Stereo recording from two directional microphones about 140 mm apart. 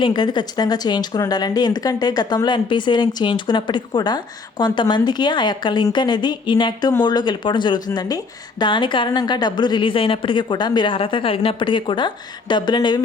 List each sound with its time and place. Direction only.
0.0 s speech: 30° left (ahead or behind)